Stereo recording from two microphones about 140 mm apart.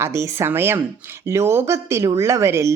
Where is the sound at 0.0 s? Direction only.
20° right (ahead or behind).